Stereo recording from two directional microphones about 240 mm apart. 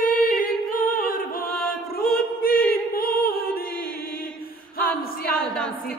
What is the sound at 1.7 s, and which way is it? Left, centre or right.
Music, left.